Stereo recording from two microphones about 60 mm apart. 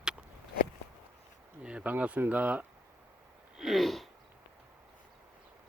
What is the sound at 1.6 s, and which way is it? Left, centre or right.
Speech, centre.